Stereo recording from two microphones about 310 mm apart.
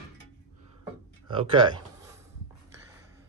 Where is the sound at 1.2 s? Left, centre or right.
Centre.